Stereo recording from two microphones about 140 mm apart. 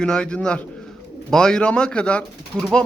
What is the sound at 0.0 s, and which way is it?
A man's voice, 5° left (ahead or behind).